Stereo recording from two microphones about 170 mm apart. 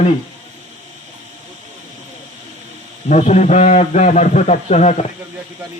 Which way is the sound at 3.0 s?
40° left (ahead or behind).